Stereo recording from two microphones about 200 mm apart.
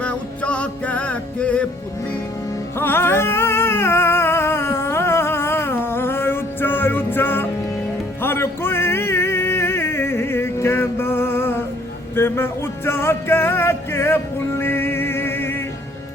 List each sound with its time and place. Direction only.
0.0 s music: 5° left (ahead or behind)
2.7 s music: 10° left (ahead or behind)